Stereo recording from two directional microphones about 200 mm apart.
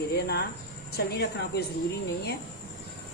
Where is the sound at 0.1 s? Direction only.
55° left (ahead or behind).